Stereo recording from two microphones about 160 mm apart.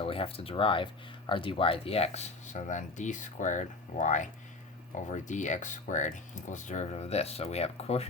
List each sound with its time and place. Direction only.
0.0 s speech: 35° left (ahead or behind)